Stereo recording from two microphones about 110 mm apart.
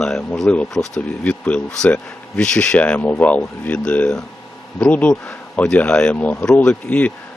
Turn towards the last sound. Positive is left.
turn(degrees=15)  # may be behind; listen again after turning